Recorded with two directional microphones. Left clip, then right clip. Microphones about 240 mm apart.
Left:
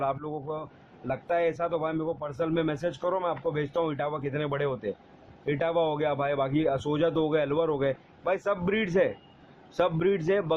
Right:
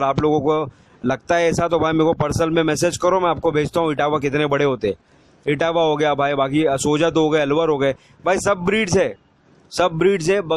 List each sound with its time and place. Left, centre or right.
0.0 s a man's voice: right